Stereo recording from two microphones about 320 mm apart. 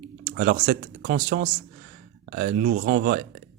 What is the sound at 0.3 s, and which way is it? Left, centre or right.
Speech, right.